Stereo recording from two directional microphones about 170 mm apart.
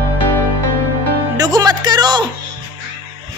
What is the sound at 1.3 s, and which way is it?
Music, 25° right (ahead or behind).